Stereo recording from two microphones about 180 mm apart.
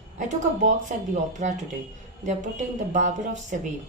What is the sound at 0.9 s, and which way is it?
A woman's voice, 45° right (ahead or behind).